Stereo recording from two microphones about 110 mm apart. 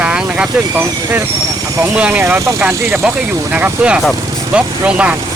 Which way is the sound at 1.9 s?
10° right (ahead or behind).